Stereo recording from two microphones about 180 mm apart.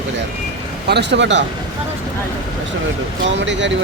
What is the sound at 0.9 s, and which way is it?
Speech, 75° right (ahead or behind).